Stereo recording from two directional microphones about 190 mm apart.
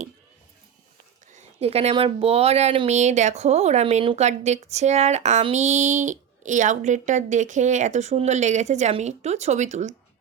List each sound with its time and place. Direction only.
1.3 s speech: 35° right (ahead or behind)